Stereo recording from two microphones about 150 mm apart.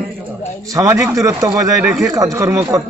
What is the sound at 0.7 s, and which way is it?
A man's voice, 20° right (ahead or behind).